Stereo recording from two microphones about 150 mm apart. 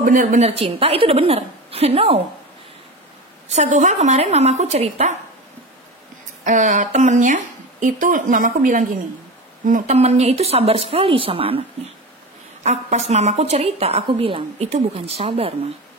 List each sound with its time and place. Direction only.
0.0 s a woman's voice: 65° right (ahead or behind)
0.4 s a woman's voice: 40° right (ahead or behind)
3.4 s a woman's voice: 50° right (ahead or behind)
6.4 s a woman's voice: 55° right (ahead or behind); by 11.6 s 40° right (ahead or behind)
12.6 s a woman's voice: 50° right (ahead or behind)